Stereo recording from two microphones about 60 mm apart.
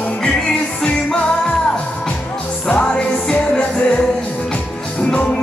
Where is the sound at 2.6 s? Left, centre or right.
Centre.